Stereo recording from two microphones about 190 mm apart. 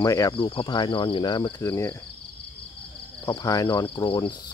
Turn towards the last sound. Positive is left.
turn(degrees=25)  # may be behind; listen again after turning